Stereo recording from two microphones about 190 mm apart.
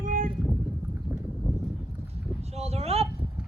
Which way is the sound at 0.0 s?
45° right (ahead or behind).